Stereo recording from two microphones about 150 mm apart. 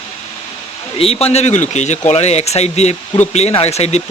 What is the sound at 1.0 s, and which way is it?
Speech, 40° left (ahead or behind).